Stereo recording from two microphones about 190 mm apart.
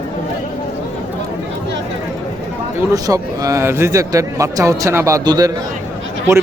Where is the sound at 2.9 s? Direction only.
20° right (ahead or behind).